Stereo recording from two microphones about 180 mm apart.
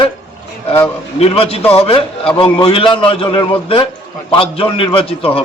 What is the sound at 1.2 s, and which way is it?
A man's voice, 35° left (ahead or behind).